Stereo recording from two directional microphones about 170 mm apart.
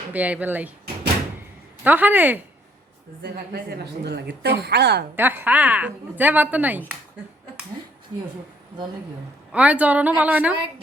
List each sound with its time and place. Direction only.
0.1 s speech: 10° right (ahead or behind)
1.8 s speech: 10° right (ahead or behind)
3.2 s a woman's voice: 70° right (ahead or behind)
5.1 s speech: 10° right (ahead or behind)
9.5 s speech: 10° right (ahead or behind)